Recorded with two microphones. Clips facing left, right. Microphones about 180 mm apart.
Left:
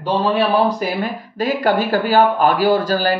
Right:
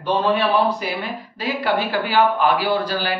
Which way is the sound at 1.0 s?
45° left (ahead or behind).